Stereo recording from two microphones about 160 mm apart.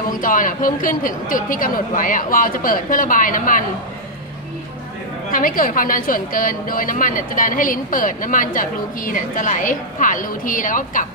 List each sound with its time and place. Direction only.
0.2 s a woman's voice: 60° left (ahead or behind)
5.3 s a woman's voice: 60° left (ahead or behind)